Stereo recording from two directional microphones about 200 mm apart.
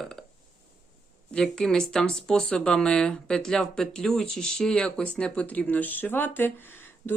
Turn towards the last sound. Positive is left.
turn(degrees=10)  # may be behind; listen again after turning